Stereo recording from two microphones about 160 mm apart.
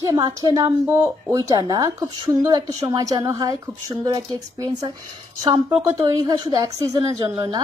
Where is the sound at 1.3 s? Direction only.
25° right (ahead or behind).